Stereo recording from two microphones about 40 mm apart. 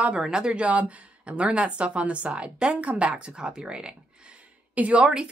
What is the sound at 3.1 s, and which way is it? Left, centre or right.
Speech, right.